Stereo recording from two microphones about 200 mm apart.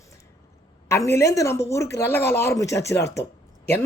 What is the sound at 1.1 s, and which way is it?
Speech, 15° left (ahead or behind).